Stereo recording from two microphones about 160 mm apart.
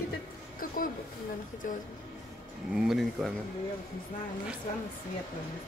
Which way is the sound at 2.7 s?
5° right (ahead or behind).